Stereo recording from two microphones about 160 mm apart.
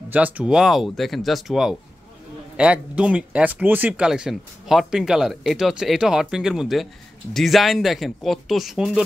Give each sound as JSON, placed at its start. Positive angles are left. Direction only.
{"t": 0.1, "sound": "speech", "side_deg": -10}